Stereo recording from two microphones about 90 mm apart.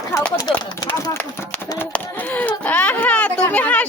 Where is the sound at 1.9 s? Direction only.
20° left (ahead or behind).